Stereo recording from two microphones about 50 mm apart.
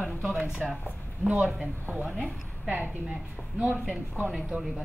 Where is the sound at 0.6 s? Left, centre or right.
Centre.